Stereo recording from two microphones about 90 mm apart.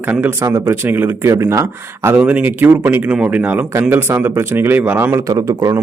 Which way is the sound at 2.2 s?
20° right (ahead or behind).